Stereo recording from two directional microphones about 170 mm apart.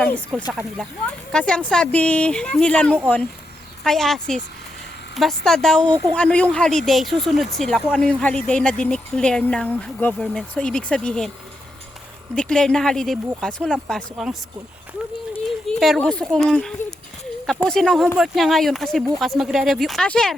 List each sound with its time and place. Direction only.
0.0 s speech: 5° left (ahead or behind)
5.9 s speech: 25° right (ahead or behind)
6.1 s speech: 5° left (ahead or behind)
12.3 s speech: 5° left (ahead or behind)
15.6 s speech: centre (ahead or behind)